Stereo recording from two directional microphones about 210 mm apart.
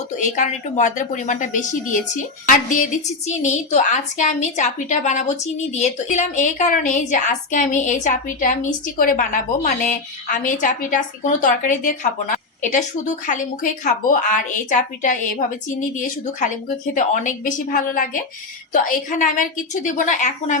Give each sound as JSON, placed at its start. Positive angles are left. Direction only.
{"t": 0.2, "sound": "a woman's voice", "side_deg": 35}
{"t": 3.2, "sound": "a woman's voice", "side_deg": 35}